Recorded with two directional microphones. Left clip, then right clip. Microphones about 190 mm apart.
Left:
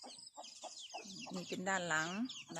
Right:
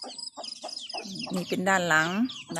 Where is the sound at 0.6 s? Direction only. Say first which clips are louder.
Right 11 dB; 30° left (ahead or behind).